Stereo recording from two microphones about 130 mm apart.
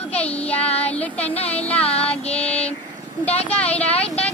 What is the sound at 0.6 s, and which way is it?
Child singing, 50° left (ahead or behind).